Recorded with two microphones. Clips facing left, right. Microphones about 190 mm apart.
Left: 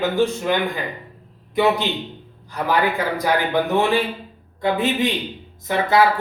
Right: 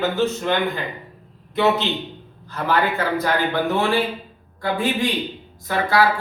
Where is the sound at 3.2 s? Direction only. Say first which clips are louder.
Left 3 dB; 15° left (ahead or behind).